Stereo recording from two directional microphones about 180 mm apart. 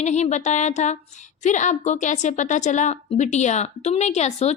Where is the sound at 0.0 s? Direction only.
40° left (ahead or behind).